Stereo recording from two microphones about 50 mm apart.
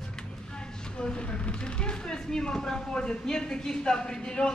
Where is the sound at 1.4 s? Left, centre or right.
Left.